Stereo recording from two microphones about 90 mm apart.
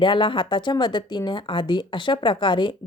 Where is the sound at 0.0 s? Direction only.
65° left (ahead or behind).